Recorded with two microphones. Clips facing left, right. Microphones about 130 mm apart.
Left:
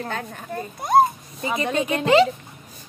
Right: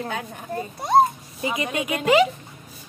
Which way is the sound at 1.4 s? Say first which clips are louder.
Left 1 dB; 35° left (ahead or behind).